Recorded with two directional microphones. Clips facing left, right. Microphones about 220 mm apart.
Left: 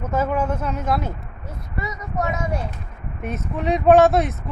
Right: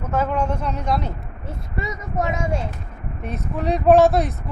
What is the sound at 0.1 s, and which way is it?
Speech, 10° left (ahead or behind).